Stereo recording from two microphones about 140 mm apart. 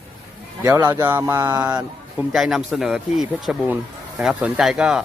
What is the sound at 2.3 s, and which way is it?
Speech, centre (ahead or behind).